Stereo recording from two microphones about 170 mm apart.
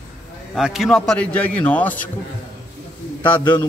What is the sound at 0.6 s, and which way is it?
A man's voice, 5° right (ahead or behind).